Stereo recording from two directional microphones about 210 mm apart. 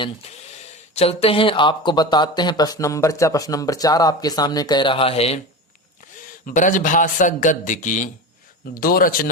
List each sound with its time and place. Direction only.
0.6 s speech: 30° left (ahead or behind)
6.4 s a man's voice: 40° left (ahead or behind)